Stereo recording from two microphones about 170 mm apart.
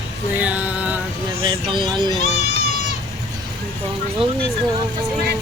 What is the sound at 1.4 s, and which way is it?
Speech, 30° right (ahead or behind).